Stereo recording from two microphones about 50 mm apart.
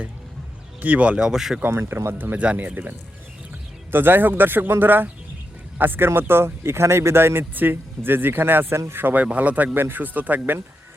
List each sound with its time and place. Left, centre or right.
0.8 s a man's voice: right
1.3 s speech: centre
1.7 s speech: right
2.1 s a man's voice: right
3.9 s speech: right
9.1 s a man's voice: right